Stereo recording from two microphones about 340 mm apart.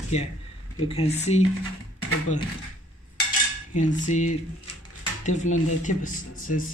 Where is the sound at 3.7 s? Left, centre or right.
Left.